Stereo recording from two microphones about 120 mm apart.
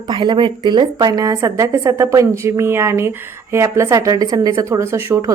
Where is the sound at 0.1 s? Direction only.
40° right (ahead or behind).